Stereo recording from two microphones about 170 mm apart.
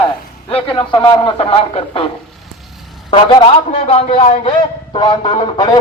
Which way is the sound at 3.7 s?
35° left (ahead or behind).